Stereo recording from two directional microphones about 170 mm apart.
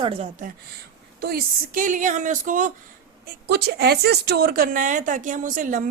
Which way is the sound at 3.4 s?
75° right (ahead or behind).